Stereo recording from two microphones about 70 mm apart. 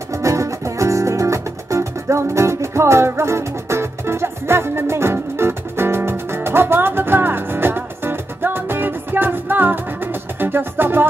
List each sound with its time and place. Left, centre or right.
0.1 s music: right